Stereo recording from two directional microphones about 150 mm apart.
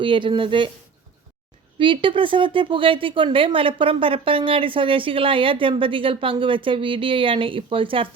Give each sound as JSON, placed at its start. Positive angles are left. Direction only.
{"t": 0.0, "sound": "speech", "side_deg": -35}
{"t": 1.8, "sound": "speech", "side_deg": -35}